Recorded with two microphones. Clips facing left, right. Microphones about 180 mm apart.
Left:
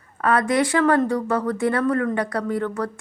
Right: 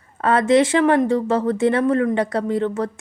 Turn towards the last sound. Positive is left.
turn(degrees=-25)  # may be behind; listen again after turning